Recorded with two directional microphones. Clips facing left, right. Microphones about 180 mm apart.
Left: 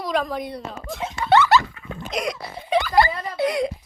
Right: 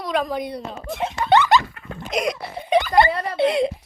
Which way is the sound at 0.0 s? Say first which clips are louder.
Right 1 dB; centre (ahead or behind).